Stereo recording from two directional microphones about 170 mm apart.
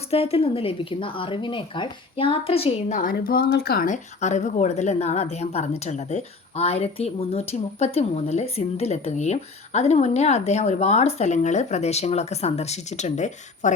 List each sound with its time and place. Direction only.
0.1 s a woman's voice: 35° left (ahead or behind)
3.0 s speech: 55° left (ahead or behind)
3.8 s a woman's voice: 45° left (ahead or behind)